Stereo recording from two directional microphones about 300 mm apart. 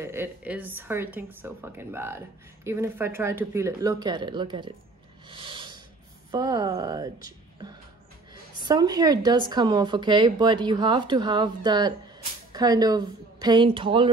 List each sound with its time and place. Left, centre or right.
0.0 s a woman's voice: centre
5.3 s snort: centre
6.3 s a woman's voice: centre
8.3 s a woman's voice: centre